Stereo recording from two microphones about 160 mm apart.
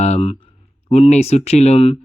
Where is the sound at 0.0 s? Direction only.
40° left (ahead or behind).